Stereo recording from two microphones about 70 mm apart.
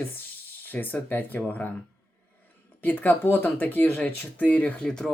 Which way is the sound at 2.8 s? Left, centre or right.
Left.